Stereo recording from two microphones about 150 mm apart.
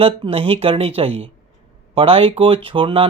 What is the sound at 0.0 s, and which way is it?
Speech, 40° right (ahead or behind).